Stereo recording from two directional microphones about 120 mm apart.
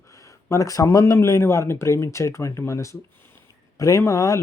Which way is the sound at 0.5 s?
30° left (ahead or behind).